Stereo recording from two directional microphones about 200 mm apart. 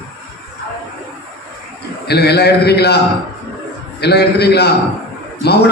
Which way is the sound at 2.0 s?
55° left (ahead or behind).